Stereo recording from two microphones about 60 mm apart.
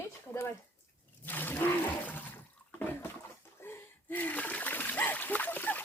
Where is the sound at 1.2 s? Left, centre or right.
Left.